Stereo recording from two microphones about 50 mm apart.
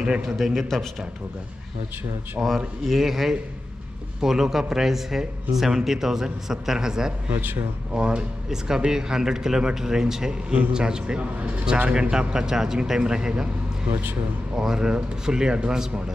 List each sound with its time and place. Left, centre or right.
0.4 s speech: centre
2.4 s speech: right
2.9 s speech: centre
7.2 s speech: right
7.9 s speech: right
14.6 s speech: centre